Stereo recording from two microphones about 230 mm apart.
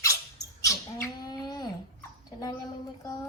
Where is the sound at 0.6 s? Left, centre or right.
Centre.